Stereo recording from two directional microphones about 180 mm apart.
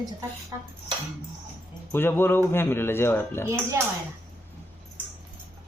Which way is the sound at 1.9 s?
10° left (ahead or behind).